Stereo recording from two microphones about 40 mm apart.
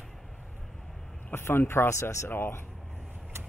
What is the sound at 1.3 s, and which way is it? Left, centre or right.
Speech, left.